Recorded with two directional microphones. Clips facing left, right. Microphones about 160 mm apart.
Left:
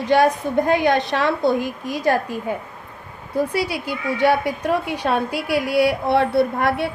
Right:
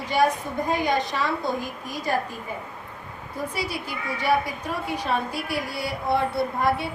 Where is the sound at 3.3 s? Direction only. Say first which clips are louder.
Left 9 dB; 75° left (ahead or behind).